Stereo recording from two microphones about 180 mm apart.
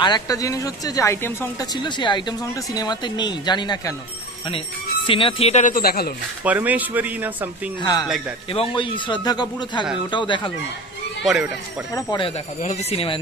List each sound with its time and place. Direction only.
0.0 s speech: 20° left (ahead or behind)
1.8 s speech: 25° left (ahead or behind)
5.0 s speech: 30° left (ahead or behind); by 6.1 s 55° left (ahead or behind)
6.4 s speech: 10° right (ahead or behind)
7.8 s speech: 20° left (ahead or behind)
11.2 s speech: centre (ahead or behind)
11.9 s speech: 20° left (ahead or behind)
12.6 s speech: 30° left (ahead or behind)